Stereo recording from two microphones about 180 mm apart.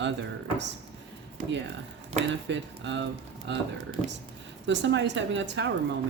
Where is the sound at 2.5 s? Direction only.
90° right.